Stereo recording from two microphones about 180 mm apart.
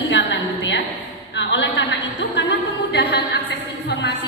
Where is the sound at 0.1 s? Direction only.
80° left.